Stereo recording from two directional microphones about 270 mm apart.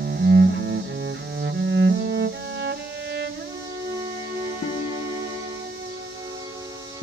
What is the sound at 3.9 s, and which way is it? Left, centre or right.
Music, centre.